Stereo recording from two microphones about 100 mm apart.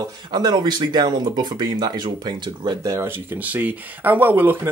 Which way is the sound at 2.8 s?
30° right (ahead or behind).